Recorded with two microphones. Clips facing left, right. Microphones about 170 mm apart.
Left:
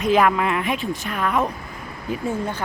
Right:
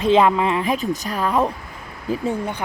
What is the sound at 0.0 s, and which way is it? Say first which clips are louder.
A woman's voice: right 2 dB; 25° right (ahead or behind).